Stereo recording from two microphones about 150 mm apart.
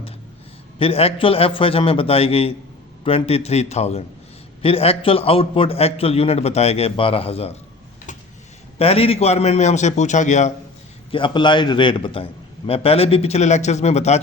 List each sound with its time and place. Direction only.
0.8 s a man's voice: 40° left (ahead or behind)
8.8 s a man's voice: 40° left (ahead or behind)
11.1 s a man's voice: 35° left (ahead or behind)